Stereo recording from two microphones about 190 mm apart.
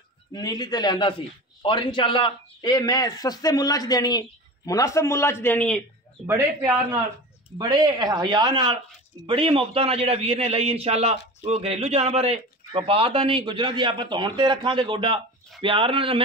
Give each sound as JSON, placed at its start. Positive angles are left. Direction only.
{"t": 0.3, "sound": "a man's voice", "side_deg": 20}
{"t": 6.2, "sound": "speech", "side_deg": -10}
{"t": 7.5, "sound": "a man's voice", "side_deg": -20}